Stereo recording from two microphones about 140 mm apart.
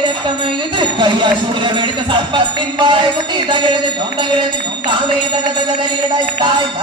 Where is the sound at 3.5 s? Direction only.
35° right (ahead or behind).